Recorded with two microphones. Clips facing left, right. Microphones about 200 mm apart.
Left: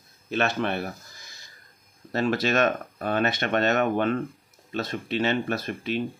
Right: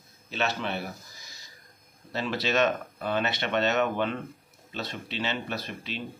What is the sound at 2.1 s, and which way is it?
Speech, 50° left (ahead or behind).